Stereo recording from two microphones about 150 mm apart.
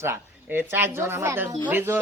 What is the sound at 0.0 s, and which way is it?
Speech, 15° right (ahead or behind).